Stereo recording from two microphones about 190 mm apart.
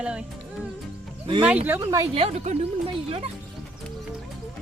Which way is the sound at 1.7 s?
15° right (ahead or behind).